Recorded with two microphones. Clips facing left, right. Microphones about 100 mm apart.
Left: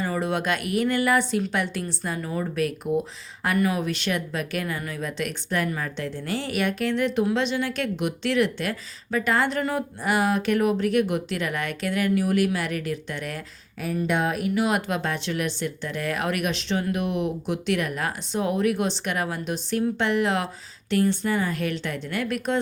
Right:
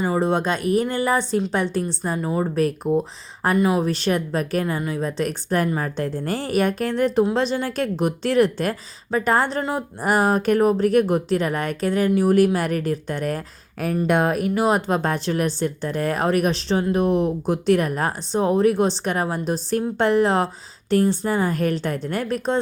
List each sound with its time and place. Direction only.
0.0 s speech: 30° right (ahead or behind)
3.6 s speech: 25° right (ahead or behind)
3.8 s speech: 35° right (ahead or behind)
10.0 s speech: 40° right (ahead or behind)